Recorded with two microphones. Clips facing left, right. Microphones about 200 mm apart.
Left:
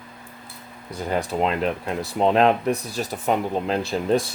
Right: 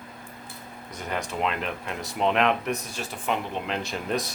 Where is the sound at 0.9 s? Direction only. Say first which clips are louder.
Left 7 dB; 35° left (ahead or behind).